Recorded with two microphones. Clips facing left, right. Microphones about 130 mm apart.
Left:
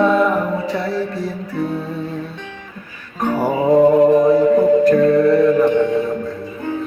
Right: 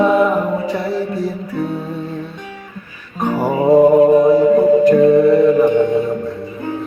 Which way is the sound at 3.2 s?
5° right (ahead or behind).